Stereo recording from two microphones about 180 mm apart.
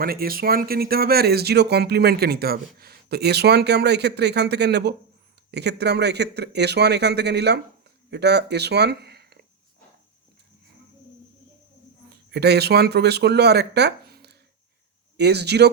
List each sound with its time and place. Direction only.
0.0 s speech: 55° right (ahead or behind)
12.0 s speech: 65° right (ahead or behind)